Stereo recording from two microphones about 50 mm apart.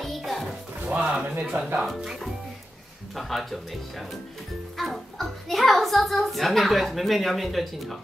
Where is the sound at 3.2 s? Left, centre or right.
Centre.